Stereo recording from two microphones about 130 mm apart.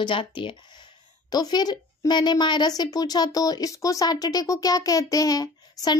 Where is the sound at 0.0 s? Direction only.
40° left (ahead or behind).